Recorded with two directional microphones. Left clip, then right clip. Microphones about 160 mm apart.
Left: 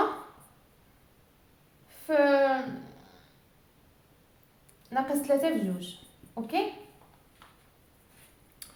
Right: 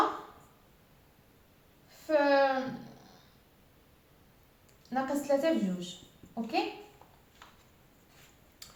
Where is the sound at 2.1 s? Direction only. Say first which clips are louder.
Left 2 dB; 30° left (ahead or behind).